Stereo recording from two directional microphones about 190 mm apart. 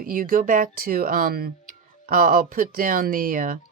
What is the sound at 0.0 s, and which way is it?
Speech, 50° right (ahead or behind).